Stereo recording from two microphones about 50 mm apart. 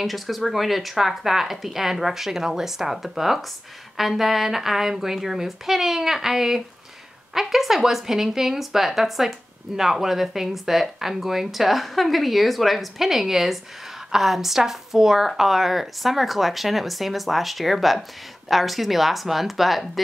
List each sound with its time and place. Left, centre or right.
0.0 s a woman's voice: centre